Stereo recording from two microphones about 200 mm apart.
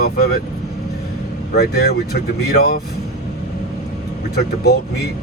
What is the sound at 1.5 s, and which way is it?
Speech, 50° left (ahead or behind).